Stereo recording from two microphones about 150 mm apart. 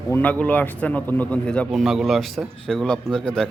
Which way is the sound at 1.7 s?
Centre (ahead or behind).